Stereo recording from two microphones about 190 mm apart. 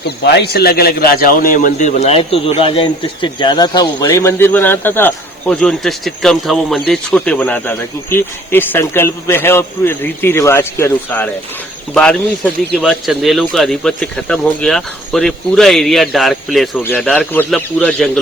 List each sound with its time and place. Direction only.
0.3 s speech: 55° left (ahead or behind); by 11.3 s 10° left (ahead or behind)
12.7 s speech: centre (ahead or behind)